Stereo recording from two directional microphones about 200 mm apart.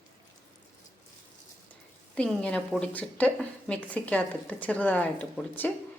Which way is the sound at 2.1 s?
5° left (ahead or behind).